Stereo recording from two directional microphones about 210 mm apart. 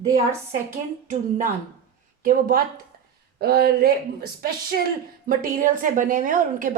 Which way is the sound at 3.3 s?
50° right (ahead or behind).